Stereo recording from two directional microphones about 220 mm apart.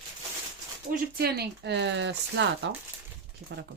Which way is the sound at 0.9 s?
45° right (ahead or behind).